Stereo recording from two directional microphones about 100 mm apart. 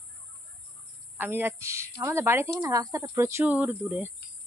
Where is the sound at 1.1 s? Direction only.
20° right (ahead or behind).